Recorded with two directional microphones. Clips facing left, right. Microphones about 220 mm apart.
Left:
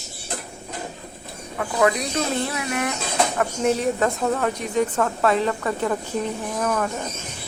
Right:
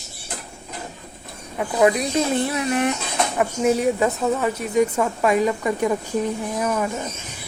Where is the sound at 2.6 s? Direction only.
30° right (ahead or behind).